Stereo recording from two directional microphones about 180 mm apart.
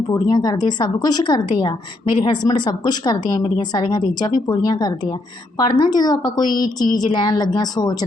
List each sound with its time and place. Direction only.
0.1 s a woman's voice: 20° left (ahead or behind)